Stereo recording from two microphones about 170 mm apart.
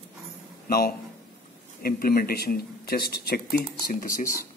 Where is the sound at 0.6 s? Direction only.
60° left (ahead or behind).